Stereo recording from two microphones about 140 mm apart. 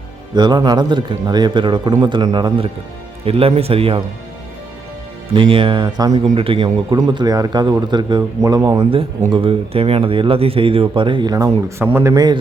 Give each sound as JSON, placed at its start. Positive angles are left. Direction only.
{"t": 0.3, "sound": "a man's voice", "side_deg": -30}
{"t": 3.2, "sound": "speech", "side_deg": -45}
{"t": 5.3, "sound": "a man's voice", "side_deg": -40}
{"t": 9.3, "sound": "a man's voice", "side_deg": -40}